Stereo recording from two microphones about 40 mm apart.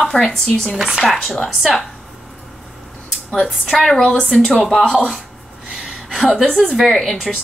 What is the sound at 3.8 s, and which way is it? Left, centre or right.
Speech, centre.